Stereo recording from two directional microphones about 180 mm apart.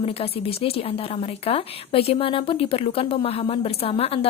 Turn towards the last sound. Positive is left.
turn(degrees=30)  # may be behind; listen again after turning